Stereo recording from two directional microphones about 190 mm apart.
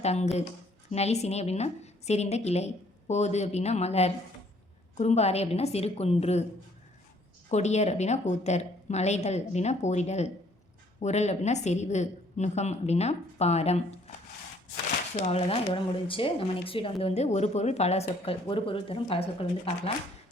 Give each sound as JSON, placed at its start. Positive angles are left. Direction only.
{"t": 0.0, "sound": "speech", "side_deg": 35}
{"t": 7.5, "sound": "speech", "side_deg": 35}
{"t": 15.1, "sound": "speech", "side_deg": 35}